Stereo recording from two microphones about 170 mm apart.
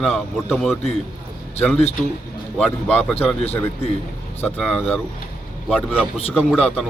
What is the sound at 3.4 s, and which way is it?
Speech, 35° left (ahead or behind).